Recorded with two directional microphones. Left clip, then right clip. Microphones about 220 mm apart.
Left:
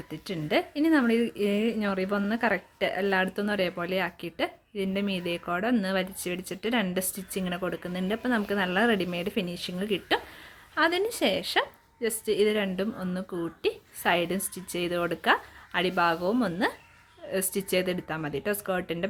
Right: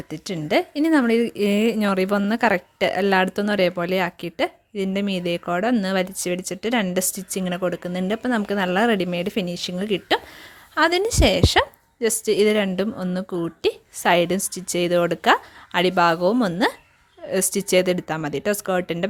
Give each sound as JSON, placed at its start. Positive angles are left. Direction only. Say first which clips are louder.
{"t": 0.1, "sound": "speech", "louder": "right 6 dB", "side_deg": -35}